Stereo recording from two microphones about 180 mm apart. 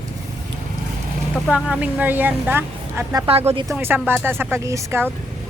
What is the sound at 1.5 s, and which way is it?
A woman's voice, 5° right (ahead or behind).